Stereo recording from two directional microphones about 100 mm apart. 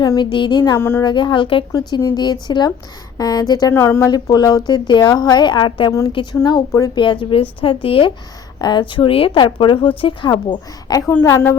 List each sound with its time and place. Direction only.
0.0 s a woman's voice: 45° left (ahead or behind)
0.8 s a woman's voice: 25° left (ahead or behind)
1.0 s a woman's voice: 50° left (ahead or behind)
2.0 s a woman's voice: 45° left (ahead or behind)
3.8 s a woman's voice: 25° left (ahead or behind)
4.1 s a woman's voice: 40° left (ahead or behind)
6.7 s speech: 35° left (ahead or behind)
6.9 s a woman's voice: 55° left (ahead or behind)
8.6 s speech: 50° left (ahead or behind)
11.2 s a woman's voice: 30° left (ahead or behind)